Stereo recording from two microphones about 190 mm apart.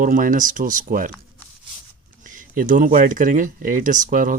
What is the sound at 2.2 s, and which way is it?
Speech, 45° right (ahead or behind).